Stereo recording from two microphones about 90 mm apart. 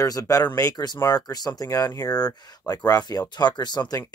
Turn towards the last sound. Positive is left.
turn(degrees=50)  # may be behind; listen again after turning